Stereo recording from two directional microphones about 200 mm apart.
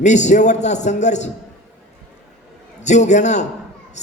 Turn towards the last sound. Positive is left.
turn(degrees=35)  # may be behind; listen again after turning